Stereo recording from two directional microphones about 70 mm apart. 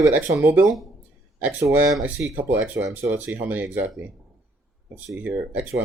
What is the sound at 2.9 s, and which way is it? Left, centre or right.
Speech, right.